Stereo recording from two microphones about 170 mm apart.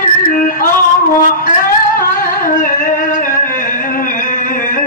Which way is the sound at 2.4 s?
50° left (ahead or behind).